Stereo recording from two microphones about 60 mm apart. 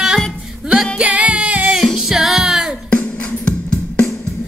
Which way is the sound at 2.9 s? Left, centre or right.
Left.